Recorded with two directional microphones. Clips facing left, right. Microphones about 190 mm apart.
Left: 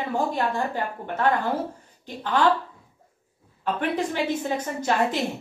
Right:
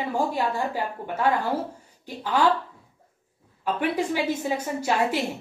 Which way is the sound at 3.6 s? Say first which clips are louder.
Even; 10° right (ahead or behind).